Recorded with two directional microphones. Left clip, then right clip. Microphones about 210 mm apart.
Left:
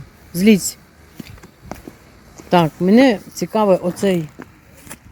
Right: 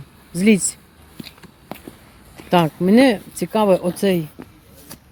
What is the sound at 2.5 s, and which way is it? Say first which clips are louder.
A woman's voice: left 2 dB; 5° left (ahead or behind).